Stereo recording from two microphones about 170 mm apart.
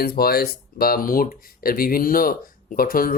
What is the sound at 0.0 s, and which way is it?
Speech, 65° left (ahead or behind).